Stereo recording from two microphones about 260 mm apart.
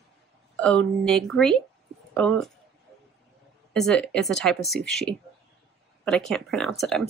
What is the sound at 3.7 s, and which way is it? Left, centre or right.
Speech, centre.